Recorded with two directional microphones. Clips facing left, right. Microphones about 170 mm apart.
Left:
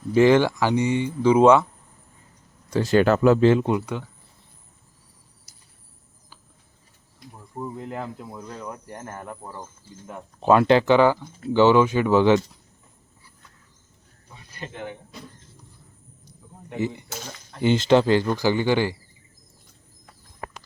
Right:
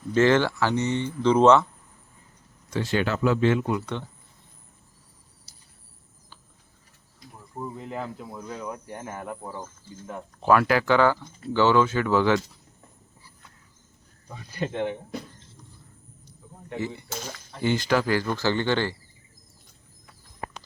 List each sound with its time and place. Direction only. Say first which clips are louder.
0.1 s speech: left 4 dB; 15° left (ahead or behind)
2.6 s speech: left 7 dB; 40° left (ahead or behind)
3.4 s speech: left 5 dB; 30° left (ahead or behind)
5.5 s cricket: even; 30° right (ahead or behind)
7.5 s speech: left 2 dB; 5° left (ahead or behind)
10.4 s speech: left 4 dB; 20° left (ahead or behind)
16.6 s speech: left 4 dB; 15° left (ahead or behind)
18.3 s speech: left 3 dB; 10° left (ahead or behind)